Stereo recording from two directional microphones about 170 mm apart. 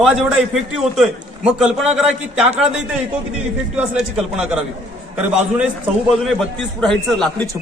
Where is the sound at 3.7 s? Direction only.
5° right (ahead or behind).